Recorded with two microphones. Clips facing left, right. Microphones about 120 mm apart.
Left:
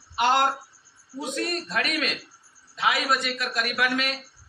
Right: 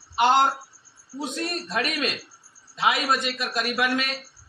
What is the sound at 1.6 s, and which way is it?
A man's voice, 20° right (ahead or behind).